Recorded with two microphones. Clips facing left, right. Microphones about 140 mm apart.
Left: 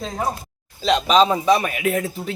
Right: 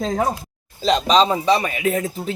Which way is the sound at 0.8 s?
Centre (ahead or behind).